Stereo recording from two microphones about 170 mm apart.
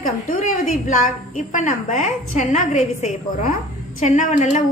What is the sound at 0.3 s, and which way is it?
A woman's voice, 50° left (ahead or behind).